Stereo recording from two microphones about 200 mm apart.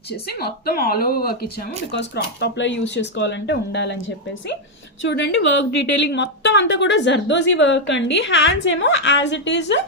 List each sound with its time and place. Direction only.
0.1 s a woman's voice: 55° left (ahead or behind)
5.0 s a woman's voice: 65° left (ahead or behind)